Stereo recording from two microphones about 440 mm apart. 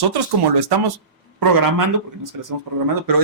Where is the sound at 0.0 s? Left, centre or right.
Right.